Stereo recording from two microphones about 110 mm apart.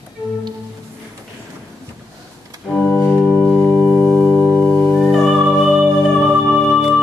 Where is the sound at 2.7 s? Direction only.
15° left (ahead or behind).